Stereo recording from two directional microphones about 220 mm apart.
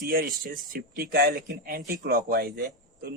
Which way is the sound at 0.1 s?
40° right (ahead or behind).